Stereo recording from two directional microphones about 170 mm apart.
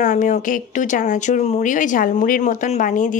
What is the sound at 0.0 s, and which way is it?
Speech, 45° left (ahead or behind).